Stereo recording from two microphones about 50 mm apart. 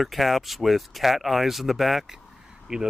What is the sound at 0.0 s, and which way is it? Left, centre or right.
Speech, centre.